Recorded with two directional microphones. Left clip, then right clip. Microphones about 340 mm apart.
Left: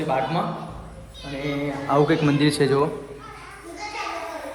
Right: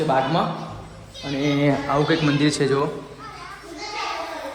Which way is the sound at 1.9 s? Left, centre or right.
Centre.